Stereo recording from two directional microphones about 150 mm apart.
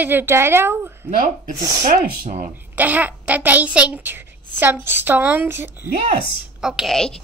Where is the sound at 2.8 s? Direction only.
10° right (ahead or behind).